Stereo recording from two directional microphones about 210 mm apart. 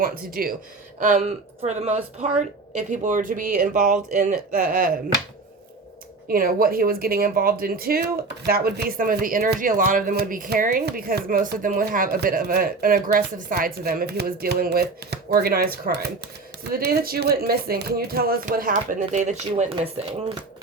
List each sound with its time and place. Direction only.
0.0 s speech: 45° right (ahead or behind)
6.2 s speech: 45° right (ahead or behind)